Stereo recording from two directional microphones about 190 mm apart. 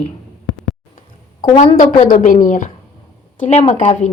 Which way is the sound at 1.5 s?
30° left (ahead or behind).